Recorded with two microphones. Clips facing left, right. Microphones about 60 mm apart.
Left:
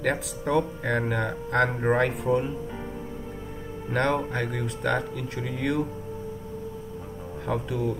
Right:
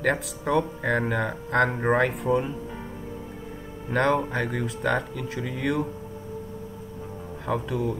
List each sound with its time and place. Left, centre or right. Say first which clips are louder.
0.0 s speech: right 2 dB; centre
1.7 s speech: right 1 dB; right
2.0 s speech: right 1 dB; centre
3.9 s speech: right 2 dB; centre
7.4 s speech: right 1 dB; centre